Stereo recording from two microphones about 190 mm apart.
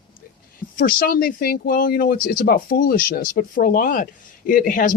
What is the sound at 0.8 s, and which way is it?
Speech, 50° left (ahead or behind).